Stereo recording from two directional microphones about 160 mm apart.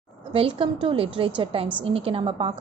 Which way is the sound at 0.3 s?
35° right (ahead or behind).